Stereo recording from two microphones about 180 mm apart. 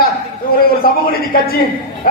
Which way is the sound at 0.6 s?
55° left (ahead or behind).